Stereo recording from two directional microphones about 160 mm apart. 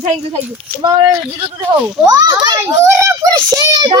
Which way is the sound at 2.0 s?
25° right (ahead or behind).